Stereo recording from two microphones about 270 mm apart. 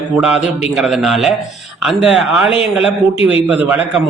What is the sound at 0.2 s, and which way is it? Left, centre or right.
A man's voice, centre.